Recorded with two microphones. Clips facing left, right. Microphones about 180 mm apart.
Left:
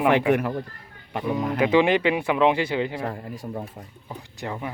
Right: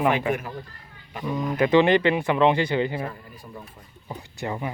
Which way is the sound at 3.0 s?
70° left (ahead or behind).